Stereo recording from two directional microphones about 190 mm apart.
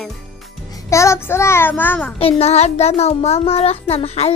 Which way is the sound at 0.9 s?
15° left (ahead or behind).